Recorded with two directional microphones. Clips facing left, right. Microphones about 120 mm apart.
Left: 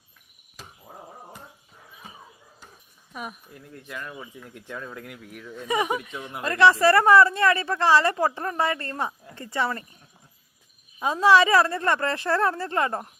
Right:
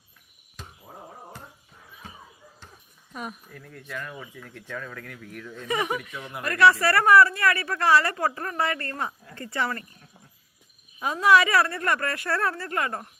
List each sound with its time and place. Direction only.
0.6 s a sound: 5° left (ahead or behind)
3.1 s speech: 5° left (ahead or behind)
3.5 s speech: 15° left (ahead or behind)
11.0 s speech: 25° left (ahead or behind)